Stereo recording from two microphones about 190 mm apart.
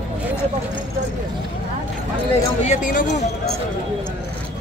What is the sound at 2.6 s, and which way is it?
Speech, 40° left (ahead or behind).